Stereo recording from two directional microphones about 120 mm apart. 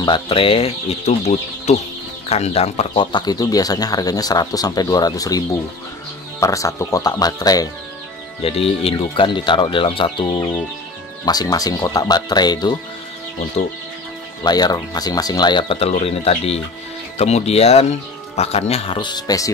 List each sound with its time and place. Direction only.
0.0 s speech: 45° left (ahead or behind); by 3.0 s 60° left (ahead or behind)
3.0 s speech: 40° left (ahead or behind)
8.4 s speech: 55° left (ahead or behind)
11.2 s speech: 30° left (ahead or behind)
14.4 s speech: 35° left (ahead or behind)
15.8 s speech: 55° left (ahead or behind)
18.9 s speech: 35° left (ahead or behind)